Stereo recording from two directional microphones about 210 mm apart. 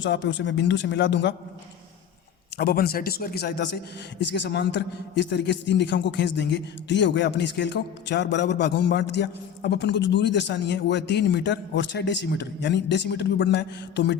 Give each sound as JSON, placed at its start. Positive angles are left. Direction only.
{"t": 0.0, "sound": "a man's voice", "side_deg": 60}
{"t": 2.6, "sound": "a man's voice", "side_deg": 45}